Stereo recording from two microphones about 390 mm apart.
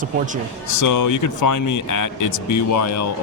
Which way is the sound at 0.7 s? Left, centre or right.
Left.